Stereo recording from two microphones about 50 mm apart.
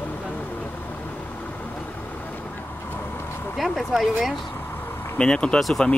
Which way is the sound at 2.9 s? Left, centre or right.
Left.